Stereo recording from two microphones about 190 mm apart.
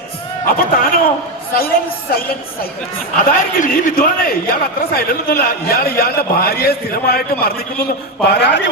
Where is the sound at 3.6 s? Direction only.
50° left (ahead or behind).